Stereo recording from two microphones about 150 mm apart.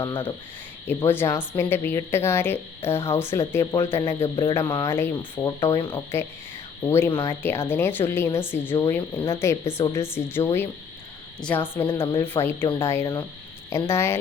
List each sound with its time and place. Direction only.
0.9 s a woman's voice: 15° left (ahead or behind)
4.2 s cricket: 35° left (ahead or behind)
4.8 s a woman's voice: 15° left (ahead or behind)